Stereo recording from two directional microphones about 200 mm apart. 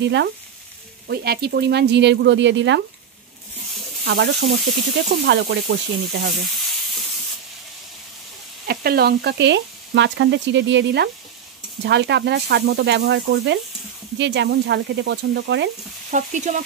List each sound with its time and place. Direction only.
0.0 s speech: 60° right (ahead or behind)
4.0 s speech: 55° right (ahead or behind)
8.6 s speech: 50° right (ahead or behind)
16.1 s frying: 35° right (ahead or behind)